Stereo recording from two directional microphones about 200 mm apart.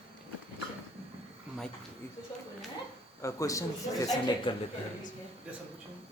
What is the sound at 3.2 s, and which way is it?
Speech, 15° left (ahead or behind).